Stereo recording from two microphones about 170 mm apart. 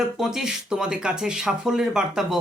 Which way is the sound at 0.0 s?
5° right (ahead or behind).